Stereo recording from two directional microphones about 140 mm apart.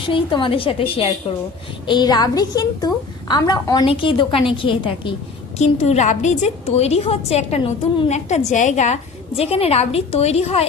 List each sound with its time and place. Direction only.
0.0 s a woman's voice: 35° left (ahead or behind)
1.9 s a woman's voice: 30° left (ahead or behind)
5.5 s a woman's voice: 50° left (ahead or behind)
8.1 s a woman's voice: 55° left (ahead or behind)